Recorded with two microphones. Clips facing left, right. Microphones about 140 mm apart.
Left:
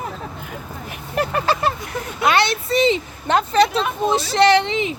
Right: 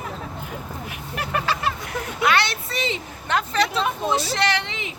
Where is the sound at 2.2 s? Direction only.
20° left (ahead or behind).